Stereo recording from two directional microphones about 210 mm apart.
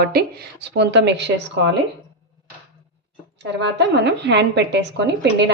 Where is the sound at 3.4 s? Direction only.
55° right (ahead or behind).